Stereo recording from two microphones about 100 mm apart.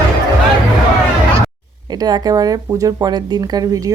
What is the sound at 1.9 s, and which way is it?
Speech, 40° right (ahead or behind).